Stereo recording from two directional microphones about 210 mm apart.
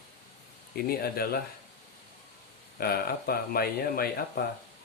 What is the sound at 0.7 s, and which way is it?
Speech, 45° left (ahead or behind).